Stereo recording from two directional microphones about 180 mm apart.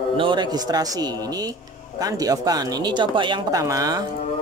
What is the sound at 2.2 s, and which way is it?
Speech, 20° right (ahead or behind).